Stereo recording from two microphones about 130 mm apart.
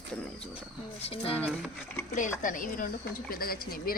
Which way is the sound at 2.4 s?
90° left.